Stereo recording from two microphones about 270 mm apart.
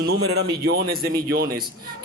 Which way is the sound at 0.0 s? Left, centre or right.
Right.